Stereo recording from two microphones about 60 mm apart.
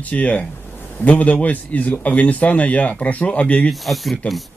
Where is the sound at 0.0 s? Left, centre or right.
Left.